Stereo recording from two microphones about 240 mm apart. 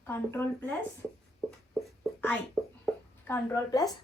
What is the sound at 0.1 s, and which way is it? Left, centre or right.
Speech, centre.